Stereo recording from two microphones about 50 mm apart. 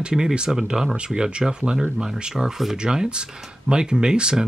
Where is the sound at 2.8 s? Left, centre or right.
Centre.